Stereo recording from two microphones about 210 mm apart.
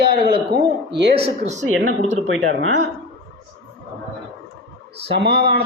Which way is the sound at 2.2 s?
60° right (ahead or behind).